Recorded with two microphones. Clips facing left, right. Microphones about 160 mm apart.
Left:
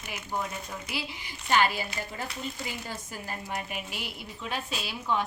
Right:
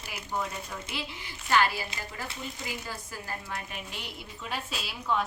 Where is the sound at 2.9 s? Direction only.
20° left (ahead or behind).